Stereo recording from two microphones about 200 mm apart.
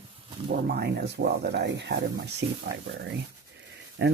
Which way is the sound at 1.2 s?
55° right (ahead or behind).